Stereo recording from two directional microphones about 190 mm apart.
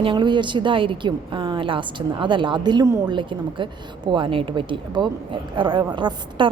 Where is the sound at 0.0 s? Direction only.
25° right (ahead or behind).